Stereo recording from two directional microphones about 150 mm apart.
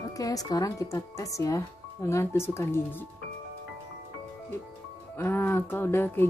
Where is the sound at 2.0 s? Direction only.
15° left (ahead or behind).